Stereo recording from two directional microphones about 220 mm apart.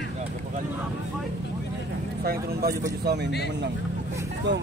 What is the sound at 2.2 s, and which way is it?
Speech, 45° right (ahead or behind).